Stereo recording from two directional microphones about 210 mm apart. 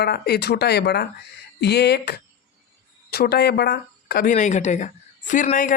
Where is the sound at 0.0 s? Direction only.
50° left (ahead or behind).